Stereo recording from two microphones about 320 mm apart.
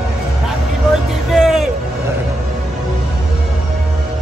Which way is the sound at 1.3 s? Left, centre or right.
Centre.